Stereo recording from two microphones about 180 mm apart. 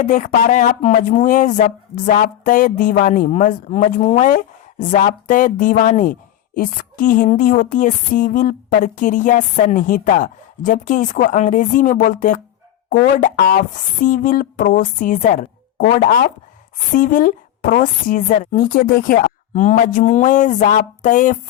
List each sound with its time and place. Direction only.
0.0 s speech: 45° left (ahead or behind)